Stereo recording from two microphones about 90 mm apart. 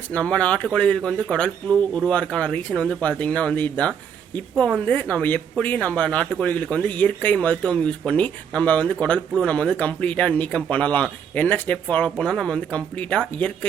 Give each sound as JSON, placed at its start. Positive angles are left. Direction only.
{"t": 0.1, "sound": "speech", "side_deg": 15}